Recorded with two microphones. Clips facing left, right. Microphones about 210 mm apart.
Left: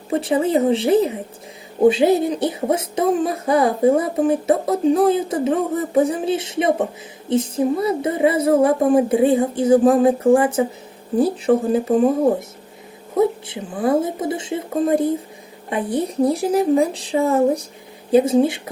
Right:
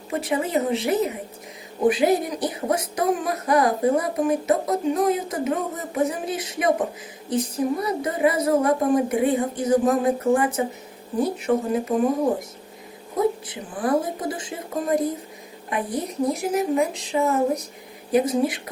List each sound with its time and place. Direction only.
0.1 s speech: 30° left (ahead or behind)
13.1 s speech: 25° left (ahead or behind)